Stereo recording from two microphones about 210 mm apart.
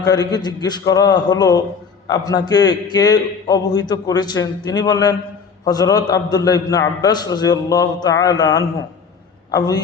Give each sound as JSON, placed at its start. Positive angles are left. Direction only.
{"t": 0.0, "sound": "a man's voice", "side_deg": 20}